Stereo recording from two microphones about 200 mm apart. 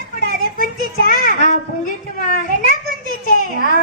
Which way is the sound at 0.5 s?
45° left (ahead or behind).